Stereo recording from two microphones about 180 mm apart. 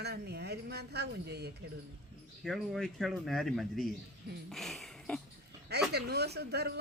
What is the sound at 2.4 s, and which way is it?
A man's voice, centre (ahead or behind).